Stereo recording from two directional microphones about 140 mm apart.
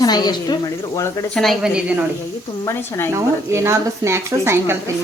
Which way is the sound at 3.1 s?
20° right (ahead or behind).